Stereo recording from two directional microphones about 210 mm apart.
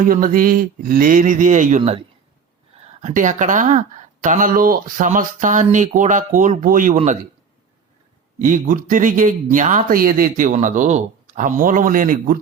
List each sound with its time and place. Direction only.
0.0 s speech: 40° right (ahead or behind)
8.4 s speech: 40° right (ahead or behind)